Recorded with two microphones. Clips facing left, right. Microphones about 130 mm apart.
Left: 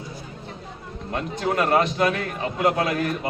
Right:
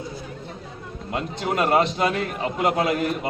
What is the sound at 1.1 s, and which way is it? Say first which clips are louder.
A man's voice: left 1 dB; 20° right (ahead or behind).